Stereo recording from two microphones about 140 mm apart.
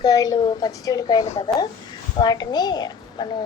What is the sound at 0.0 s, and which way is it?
A woman's voice, 25° left (ahead or behind).